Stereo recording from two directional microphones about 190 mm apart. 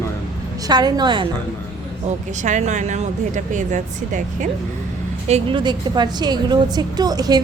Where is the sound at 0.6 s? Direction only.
20° right (ahead or behind).